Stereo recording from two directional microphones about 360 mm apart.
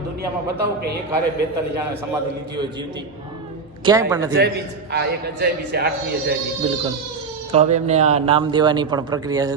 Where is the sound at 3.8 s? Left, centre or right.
Centre.